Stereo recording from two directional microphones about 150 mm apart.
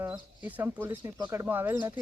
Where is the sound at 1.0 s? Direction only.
30° right (ahead or behind).